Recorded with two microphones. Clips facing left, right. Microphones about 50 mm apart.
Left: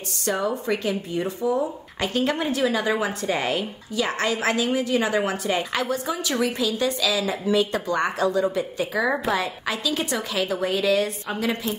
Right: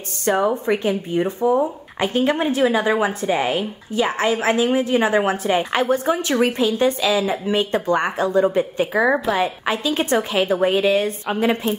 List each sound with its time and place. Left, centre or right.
0.2 s a woman's voice: right